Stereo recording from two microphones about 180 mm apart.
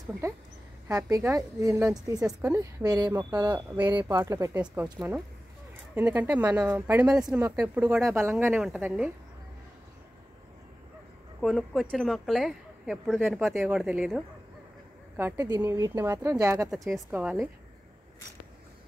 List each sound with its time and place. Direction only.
0.9 s speech: 15° right (ahead or behind)
11.4 s speech: centre (ahead or behind); by 16.7 s 15° right (ahead or behind)
16.7 s speech: centre (ahead or behind)